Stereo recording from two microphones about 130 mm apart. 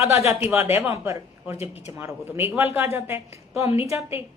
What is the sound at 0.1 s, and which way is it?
Speech, 20° right (ahead or behind).